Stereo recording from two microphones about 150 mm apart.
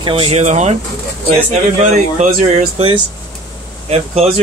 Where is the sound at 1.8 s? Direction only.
45° right (ahead or behind).